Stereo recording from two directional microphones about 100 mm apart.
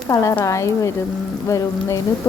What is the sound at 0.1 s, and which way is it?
Speech, 30° left (ahead or behind).